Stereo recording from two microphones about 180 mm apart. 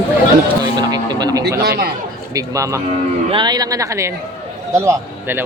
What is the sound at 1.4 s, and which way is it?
Speech, 60° right (ahead or behind).